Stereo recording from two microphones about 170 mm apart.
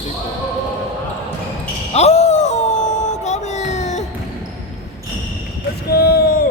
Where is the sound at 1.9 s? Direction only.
40° left (ahead or behind).